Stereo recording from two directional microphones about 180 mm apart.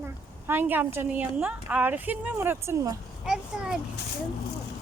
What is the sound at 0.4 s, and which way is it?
Speech, 10° right (ahead or behind).